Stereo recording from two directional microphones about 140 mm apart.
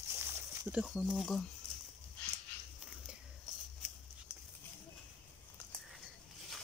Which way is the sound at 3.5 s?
Centre (ahead or behind).